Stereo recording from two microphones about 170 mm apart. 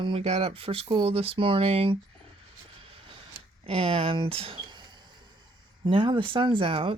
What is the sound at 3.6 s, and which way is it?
Speech, 35° right (ahead or behind).